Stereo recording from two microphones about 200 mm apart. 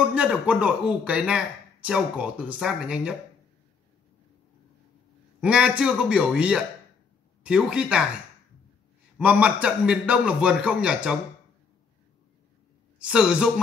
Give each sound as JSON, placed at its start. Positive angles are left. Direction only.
{"t": 0.0, "sound": "speech", "side_deg": -5}
{"t": 5.4, "sound": "speech", "side_deg": -5}
{"t": 9.2, "sound": "speech", "side_deg": -5}
{"t": 13.0, "sound": "speech", "side_deg": -5}